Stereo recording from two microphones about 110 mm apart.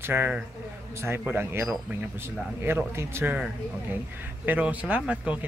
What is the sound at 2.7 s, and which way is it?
Speech, 20° right (ahead or behind).